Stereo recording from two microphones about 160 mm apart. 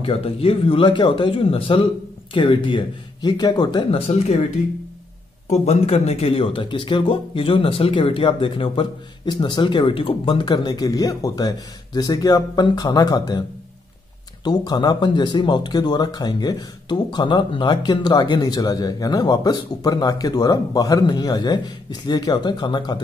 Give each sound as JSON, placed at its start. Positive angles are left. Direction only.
{"t": 0.0, "sound": "speech", "side_deg": 35}
{"t": 5.5, "sound": "speech", "side_deg": 40}
{"t": 14.4, "sound": "speech", "side_deg": 25}